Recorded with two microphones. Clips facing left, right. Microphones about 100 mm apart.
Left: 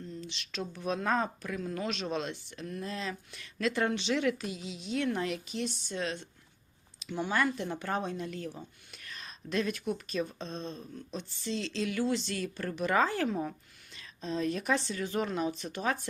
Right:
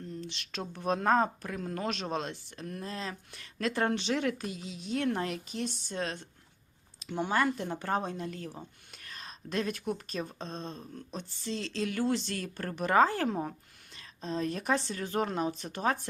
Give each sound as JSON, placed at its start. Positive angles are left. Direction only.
{"t": 0.2, "sound": "speech", "side_deg": -55}
{"t": 7.0, "sound": "a sound", "side_deg": -50}
{"t": 7.3, "sound": "speech", "side_deg": -35}